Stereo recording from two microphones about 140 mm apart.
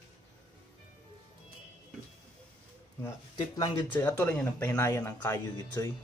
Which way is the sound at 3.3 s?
30° left (ahead or behind).